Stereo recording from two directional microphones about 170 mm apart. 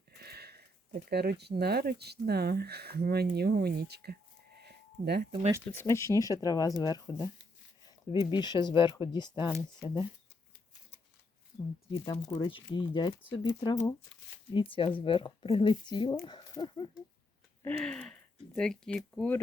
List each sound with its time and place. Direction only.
0.2 s a sound: 70° right (ahead or behind)
1.1 s speech: 70° right (ahead or behind)
4.6 s a sound: 75° right (ahead or behind)
5.6 s speech: 15° left (ahead or behind)
11.9 s speech: 30° left (ahead or behind)
17.7 s speech: 5° left (ahead or behind)